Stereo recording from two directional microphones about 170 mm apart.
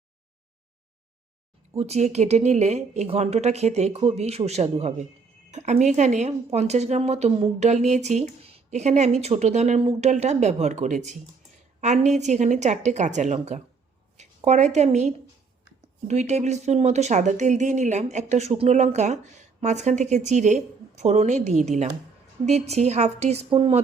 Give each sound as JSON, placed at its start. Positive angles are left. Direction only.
{"t": 1.7, "sound": "a woman's voice", "side_deg": -40}